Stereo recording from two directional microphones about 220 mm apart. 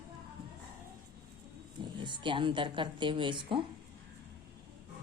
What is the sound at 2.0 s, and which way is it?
A woman's voice, 20° right (ahead or behind).